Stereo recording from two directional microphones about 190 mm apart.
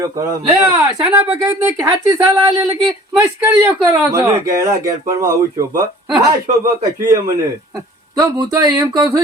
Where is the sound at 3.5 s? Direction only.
10° right (ahead or behind).